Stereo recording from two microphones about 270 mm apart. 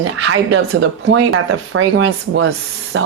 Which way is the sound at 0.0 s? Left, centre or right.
Right.